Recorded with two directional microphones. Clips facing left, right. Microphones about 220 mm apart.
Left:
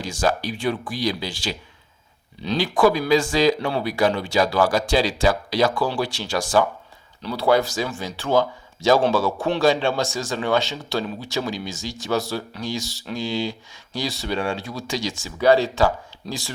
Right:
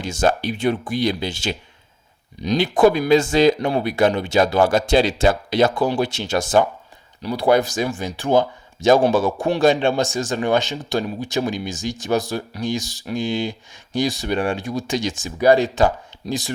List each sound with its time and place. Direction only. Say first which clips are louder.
0.0 s speech: right 3 dB; 25° right (ahead or behind)